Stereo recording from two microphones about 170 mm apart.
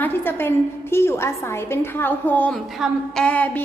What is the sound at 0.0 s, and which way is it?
A woman's voice, 10° left (ahead or behind).